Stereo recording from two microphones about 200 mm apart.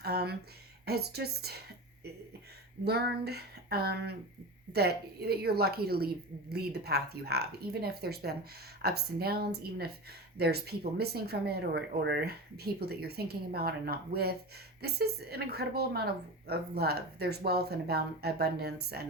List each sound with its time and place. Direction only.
0.0 s speech: 50° right (ahead or behind)
2.8 s speech: 55° right (ahead or behind)